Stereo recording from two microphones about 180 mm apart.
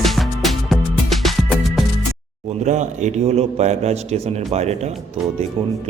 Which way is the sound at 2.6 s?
40° right (ahead or behind).